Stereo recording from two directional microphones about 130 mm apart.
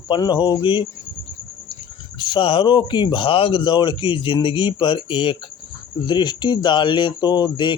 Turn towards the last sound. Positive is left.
turn(degrees=35)  # may be behind; listen again after turning